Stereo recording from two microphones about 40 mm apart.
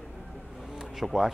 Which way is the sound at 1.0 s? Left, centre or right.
Centre.